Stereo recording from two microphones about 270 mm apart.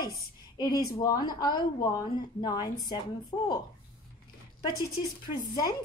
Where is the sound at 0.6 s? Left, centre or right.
Centre.